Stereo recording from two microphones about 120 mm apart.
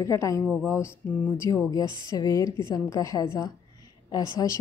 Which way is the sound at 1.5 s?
35° left (ahead or behind).